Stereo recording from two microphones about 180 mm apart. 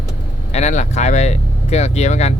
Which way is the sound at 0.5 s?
40° left (ahead or behind).